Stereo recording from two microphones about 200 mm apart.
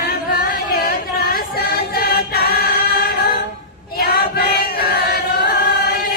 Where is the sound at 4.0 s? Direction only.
50° left (ahead or behind).